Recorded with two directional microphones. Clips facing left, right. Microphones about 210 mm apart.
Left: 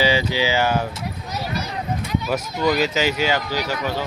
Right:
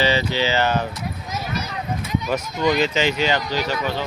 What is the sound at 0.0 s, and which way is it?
Speech, 10° left (ahead or behind).